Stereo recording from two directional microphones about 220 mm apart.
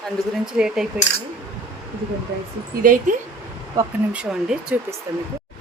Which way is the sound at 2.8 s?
40° right (ahead or behind).